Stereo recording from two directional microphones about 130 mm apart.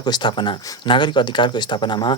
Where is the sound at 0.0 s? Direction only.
35° left (ahead or behind).